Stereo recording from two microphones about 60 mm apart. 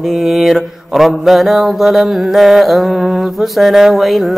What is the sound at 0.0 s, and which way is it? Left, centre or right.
Mantra, centre.